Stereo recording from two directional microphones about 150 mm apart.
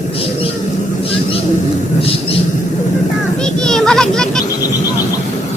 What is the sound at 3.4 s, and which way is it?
Children playing, 5° left (ahead or behind).